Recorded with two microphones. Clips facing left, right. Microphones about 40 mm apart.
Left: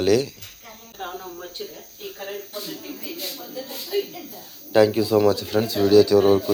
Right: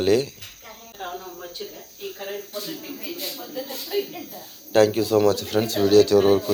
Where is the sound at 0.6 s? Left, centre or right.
Centre.